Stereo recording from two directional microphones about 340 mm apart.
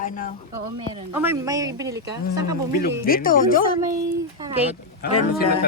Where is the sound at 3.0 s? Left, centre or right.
Left.